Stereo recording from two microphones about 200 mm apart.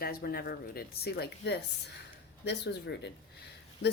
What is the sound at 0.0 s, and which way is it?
A woman's voice, 50° left (ahead or behind).